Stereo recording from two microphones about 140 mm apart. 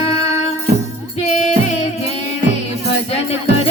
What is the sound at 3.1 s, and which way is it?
Music, 45° left (ahead or behind).